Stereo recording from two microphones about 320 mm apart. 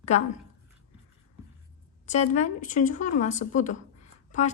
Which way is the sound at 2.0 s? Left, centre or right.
Left.